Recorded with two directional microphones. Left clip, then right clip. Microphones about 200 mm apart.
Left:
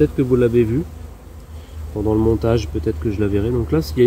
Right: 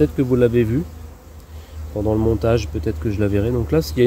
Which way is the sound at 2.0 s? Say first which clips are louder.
Left 1 dB; 50° right (ahead or behind).